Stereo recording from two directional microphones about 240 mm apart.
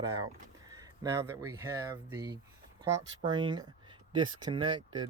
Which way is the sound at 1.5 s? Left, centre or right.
Centre.